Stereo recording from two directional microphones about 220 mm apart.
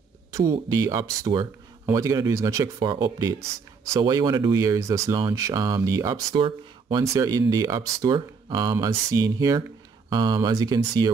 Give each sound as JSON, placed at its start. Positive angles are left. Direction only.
{"t": 0.3, "sound": "speech", "side_deg": -15}